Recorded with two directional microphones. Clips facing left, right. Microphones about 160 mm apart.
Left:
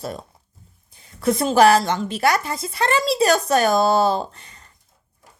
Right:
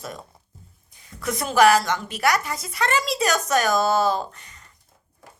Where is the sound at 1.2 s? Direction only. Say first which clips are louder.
Left 4 dB; 30° left (ahead or behind).